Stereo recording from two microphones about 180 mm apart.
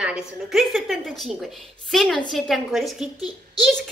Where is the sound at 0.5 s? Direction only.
Centre (ahead or behind).